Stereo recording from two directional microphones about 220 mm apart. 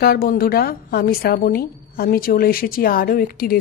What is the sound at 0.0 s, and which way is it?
A woman's voice, 40° left (ahead or behind).